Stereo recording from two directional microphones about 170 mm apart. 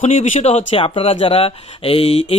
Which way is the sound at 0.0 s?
45° left (ahead or behind).